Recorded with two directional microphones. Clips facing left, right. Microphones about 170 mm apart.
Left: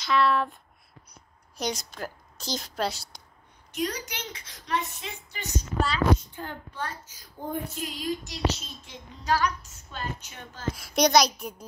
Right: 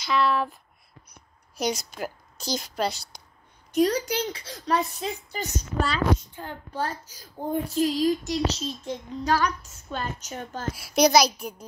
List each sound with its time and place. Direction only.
0.0 s a woman's voice: centre (ahead or behind)
1.6 s a woman's voice: 5° right (ahead or behind)
3.7 s a woman's voice: 35° right (ahead or behind)
10.8 s a woman's voice: centre (ahead or behind)